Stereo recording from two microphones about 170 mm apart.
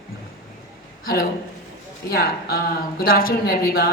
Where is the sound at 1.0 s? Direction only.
60° left (ahead or behind).